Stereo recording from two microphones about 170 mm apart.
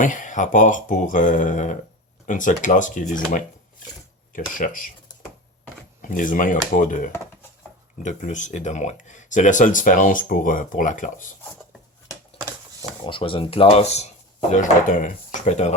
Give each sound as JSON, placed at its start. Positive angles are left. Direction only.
{"t": 0.0, "sound": "speech", "side_deg": 50}
{"t": 6.0, "sound": "speech", "side_deg": 50}
{"t": 13.1, "sound": "speech", "side_deg": 30}
{"t": 14.5, "sound": "speech", "side_deg": 50}